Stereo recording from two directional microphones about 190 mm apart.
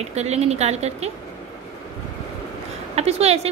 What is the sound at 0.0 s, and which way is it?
A woman's voice, 35° right (ahead or behind).